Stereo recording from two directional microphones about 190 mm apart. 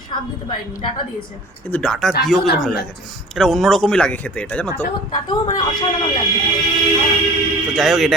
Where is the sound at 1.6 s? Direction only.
5° left (ahead or behind).